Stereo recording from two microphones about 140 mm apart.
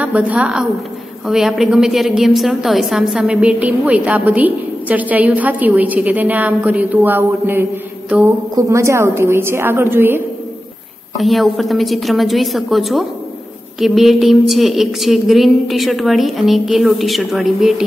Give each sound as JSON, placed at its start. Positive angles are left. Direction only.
{"t": 0.0, "sound": "a woman's voice", "side_deg": -10}
{"t": 11.1, "sound": "a woman's voice", "side_deg": 0}